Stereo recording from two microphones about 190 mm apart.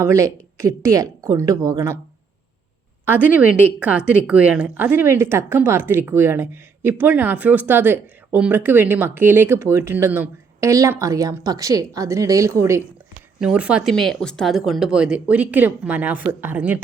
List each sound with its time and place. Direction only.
0.0 s speech: 15° right (ahead or behind)
3.2 s speech: 10° right (ahead or behind)
13.4 s speech: 5° right (ahead or behind)